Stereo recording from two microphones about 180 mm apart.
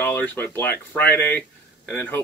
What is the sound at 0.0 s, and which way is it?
Speech, 10° left (ahead or behind).